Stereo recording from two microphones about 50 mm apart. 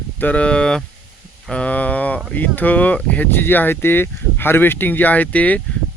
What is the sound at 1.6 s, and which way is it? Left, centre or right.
Speech, left.